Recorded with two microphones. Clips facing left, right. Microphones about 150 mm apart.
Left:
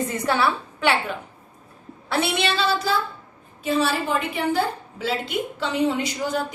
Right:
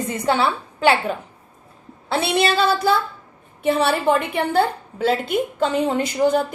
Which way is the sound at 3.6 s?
60° right (ahead or behind).